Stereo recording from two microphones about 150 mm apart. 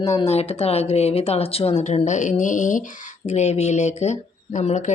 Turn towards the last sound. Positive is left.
turn(degrees=50)  # may be behind; listen again after turning